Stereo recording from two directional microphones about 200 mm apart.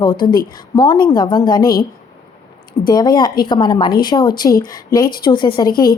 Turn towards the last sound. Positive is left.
turn(degrees=20)  # may be behind; listen again after turning